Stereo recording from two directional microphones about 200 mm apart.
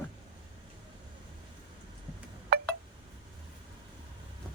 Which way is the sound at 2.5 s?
50° right (ahead or behind).